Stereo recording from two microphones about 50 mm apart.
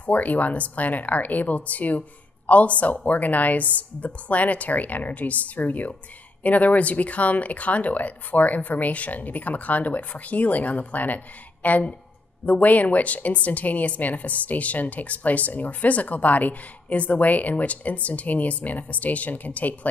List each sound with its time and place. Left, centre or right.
0.0 s a woman's voice: left